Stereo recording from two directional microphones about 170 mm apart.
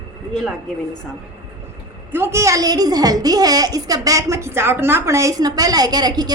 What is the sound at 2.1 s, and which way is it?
A woman's voice, 15° right (ahead or behind).